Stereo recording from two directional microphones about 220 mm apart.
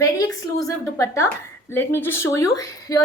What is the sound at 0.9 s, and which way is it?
A woman's voice, 10° left (ahead or behind).